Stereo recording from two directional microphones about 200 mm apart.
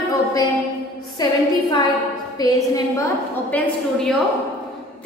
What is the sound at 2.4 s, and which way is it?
Speech, 15° left (ahead or behind).